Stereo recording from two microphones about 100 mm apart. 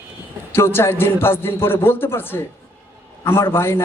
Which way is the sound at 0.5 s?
25° left (ahead or behind).